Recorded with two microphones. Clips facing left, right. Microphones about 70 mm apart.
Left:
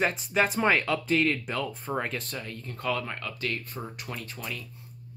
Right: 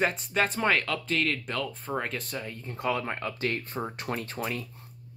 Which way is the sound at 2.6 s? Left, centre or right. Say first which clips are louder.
Right 1 dB; centre.